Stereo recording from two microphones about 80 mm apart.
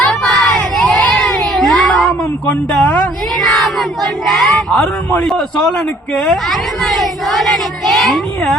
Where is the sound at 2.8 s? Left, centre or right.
Centre.